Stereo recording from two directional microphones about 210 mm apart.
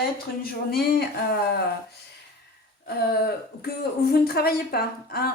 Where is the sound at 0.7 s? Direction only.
50° left (ahead or behind).